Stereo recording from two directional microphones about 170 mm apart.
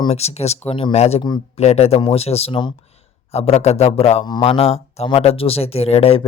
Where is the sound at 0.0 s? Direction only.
35° left (ahead or behind).